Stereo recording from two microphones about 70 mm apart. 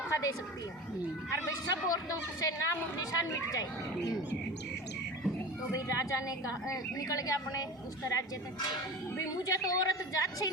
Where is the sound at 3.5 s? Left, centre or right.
Left.